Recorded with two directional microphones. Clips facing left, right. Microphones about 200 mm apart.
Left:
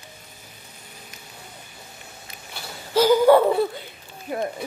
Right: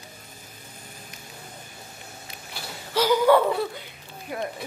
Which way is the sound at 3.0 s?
30° left (ahead or behind).